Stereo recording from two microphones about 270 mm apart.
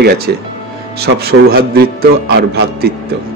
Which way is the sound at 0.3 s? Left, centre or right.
Right.